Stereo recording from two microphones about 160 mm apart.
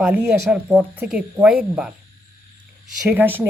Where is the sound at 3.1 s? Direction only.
10° right (ahead or behind).